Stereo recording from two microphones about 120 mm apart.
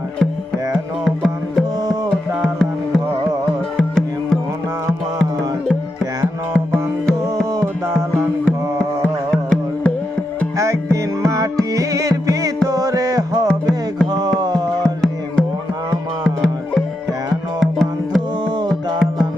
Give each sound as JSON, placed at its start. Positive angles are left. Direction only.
{"t": 1.0, "sound": "music", "side_deg": 5}
{"t": 6.7, "sound": "music", "side_deg": 5}
{"t": 7.5, "sound": "music", "side_deg": -25}
{"t": 8.4, "sound": "music", "side_deg": 5}
{"t": 10.9, "sound": "music", "side_deg": -25}
{"t": 13.5, "sound": "music", "side_deg": 5}
{"t": 14.1, "sound": "music", "side_deg": -35}
{"t": 14.8, "sound": "music", "side_deg": 5}
{"t": 18.4, "sound": "music", "side_deg": -40}